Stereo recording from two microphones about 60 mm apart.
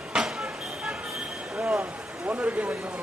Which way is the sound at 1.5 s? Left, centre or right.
Right.